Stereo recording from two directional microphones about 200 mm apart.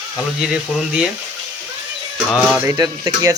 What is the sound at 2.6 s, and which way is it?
Speech, 20° right (ahead or behind).